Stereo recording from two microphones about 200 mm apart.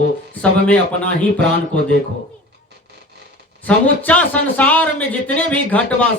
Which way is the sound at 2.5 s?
55° right (ahead or behind).